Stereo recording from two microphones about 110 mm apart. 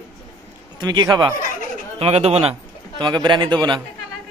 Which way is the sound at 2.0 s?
80° right.